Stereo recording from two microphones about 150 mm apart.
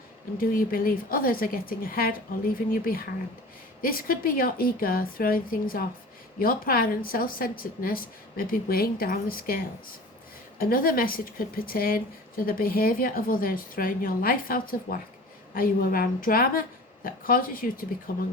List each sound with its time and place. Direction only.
0.3 s a woman's voice: 75° left (ahead or behind)
3.8 s a woman's voice: 70° left (ahead or behind)
10.6 s a woman's voice: 75° left (ahead or behind)